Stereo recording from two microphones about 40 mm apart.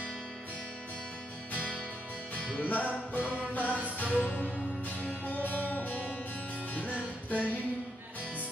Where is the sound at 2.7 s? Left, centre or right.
Left.